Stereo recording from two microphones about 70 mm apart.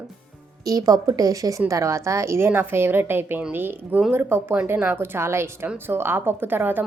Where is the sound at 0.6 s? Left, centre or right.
Right.